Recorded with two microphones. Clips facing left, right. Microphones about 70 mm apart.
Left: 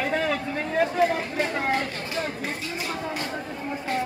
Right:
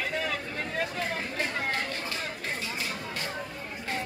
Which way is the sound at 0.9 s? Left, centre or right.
Centre.